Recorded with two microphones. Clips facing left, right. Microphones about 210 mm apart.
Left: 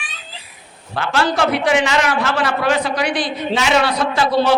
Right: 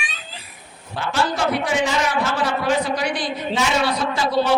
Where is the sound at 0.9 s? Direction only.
80° left.